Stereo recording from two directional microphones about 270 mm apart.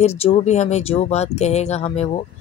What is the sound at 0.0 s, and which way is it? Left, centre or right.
Speech, left.